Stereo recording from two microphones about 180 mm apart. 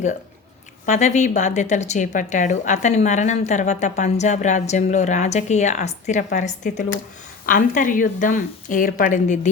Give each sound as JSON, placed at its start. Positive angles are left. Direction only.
{"t": 0.9, "sound": "a woman's voice", "side_deg": 40}